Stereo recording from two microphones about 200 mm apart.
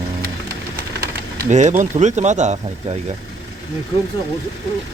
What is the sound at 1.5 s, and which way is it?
Speech, 35° right (ahead or behind).